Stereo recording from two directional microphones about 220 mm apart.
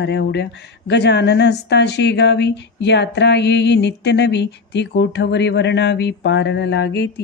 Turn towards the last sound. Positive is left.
turn(degrees=50)  # may be behind; listen again after turning